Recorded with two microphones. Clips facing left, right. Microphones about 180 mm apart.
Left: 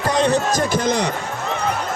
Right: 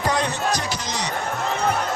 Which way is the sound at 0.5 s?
50° left (ahead or behind).